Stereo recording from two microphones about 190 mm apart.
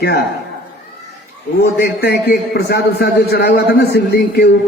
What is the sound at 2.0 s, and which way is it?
A man's voice, 60° left (ahead or behind).